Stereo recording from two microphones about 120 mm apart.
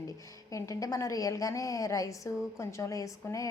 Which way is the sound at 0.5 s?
25° left (ahead or behind).